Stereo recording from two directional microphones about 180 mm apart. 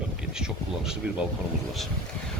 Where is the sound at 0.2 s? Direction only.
5° right (ahead or behind).